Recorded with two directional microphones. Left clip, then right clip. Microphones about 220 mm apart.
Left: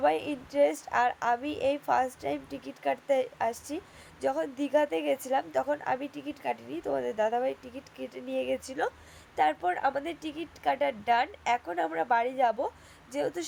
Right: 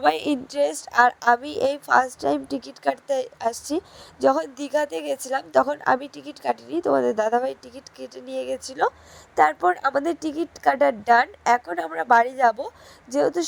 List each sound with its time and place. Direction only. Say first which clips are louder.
0.0 s speech: right 6 dB; 40° right (ahead or behind)